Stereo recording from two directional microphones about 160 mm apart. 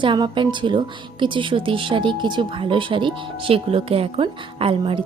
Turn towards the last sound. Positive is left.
turn(degrees=-35)  # may be behind; listen again after turning